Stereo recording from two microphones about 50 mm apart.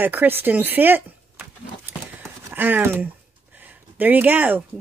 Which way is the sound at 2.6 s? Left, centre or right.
Right.